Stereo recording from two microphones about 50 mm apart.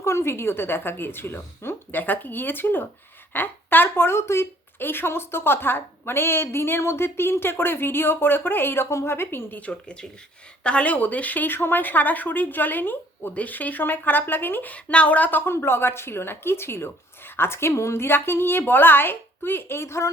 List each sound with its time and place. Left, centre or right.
0.0 s a woman's voice: left
4.2 s speech: left
4.8 s a woman's voice: left
8.9 s a woman's voice: left
9.5 s speech: left
13.3 s speech: left
14.7 s speech: left
15.4 s a woman's voice: left